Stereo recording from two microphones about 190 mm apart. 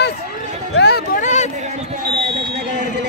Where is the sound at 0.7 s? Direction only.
60° left (ahead or behind).